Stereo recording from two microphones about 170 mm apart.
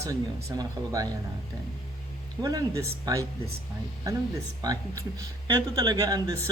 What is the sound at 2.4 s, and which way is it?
Speech, 20° right (ahead or behind).